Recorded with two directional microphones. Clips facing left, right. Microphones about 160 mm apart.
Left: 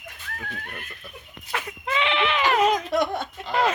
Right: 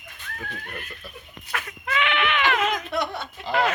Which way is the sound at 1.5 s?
25° left (ahead or behind).